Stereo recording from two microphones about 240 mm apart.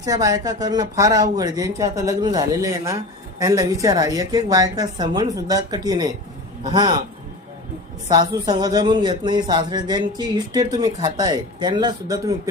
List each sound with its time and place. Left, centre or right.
0.0 s speech: centre
8.1 s speech: centre